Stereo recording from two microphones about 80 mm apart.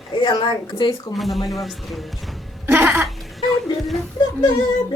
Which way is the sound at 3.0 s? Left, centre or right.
Centre.